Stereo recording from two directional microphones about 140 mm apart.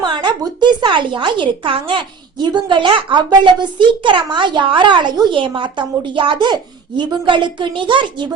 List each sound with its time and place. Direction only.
0.0 s speech: 35° right (ahead or behind)